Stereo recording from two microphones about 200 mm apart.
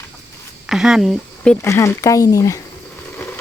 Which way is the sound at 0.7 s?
Centre (ahead or behind).